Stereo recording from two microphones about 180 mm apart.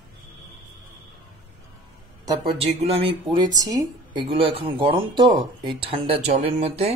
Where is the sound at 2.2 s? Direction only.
25° right (ahead or behind).